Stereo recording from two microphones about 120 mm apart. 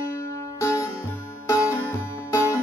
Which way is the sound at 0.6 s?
25° left (ahead or behind).